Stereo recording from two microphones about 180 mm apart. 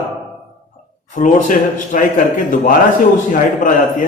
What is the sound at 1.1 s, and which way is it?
A man's voice, 45° left (ahead or behind).